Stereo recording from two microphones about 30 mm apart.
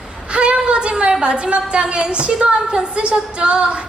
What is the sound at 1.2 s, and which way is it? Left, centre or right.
A woman's voice, right.